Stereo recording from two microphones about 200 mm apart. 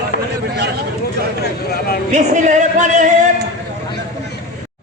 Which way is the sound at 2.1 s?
40° right (ahead or behind).